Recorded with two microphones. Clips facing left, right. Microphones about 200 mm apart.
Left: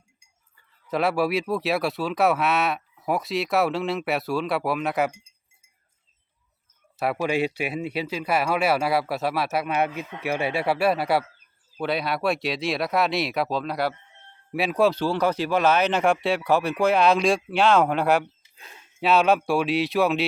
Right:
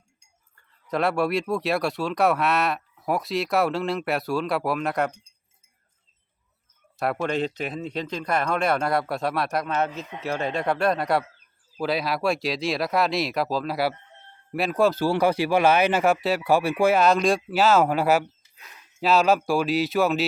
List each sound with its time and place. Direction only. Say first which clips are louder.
0.5 s speech: even; centre (ahead or behind)
6.9 s speech: left 1 dB; 5° left (ahead or behind)
15.0 s speech: right 2 dB; 10° right (ahead or behind)
18.5 s a sound: left 2 dB; 30° left (ahead or behind)
18.9 s speech: even; centre (ahead or behind)